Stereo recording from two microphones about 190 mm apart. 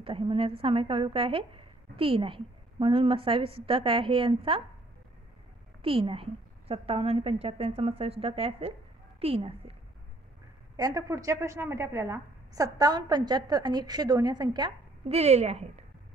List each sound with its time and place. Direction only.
0.0 s a woman's voice: 30° right (ahead or behind)
5.8 s a woman's voice: 30° right (ahead or behind)
10.8 s a woman's voice: 20° right (ahead or behind); by 15.8 s 35° right (ahead or behind)